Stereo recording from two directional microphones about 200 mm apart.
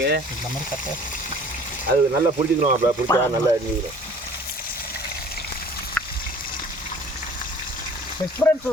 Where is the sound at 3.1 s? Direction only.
15° left (ahead or behind).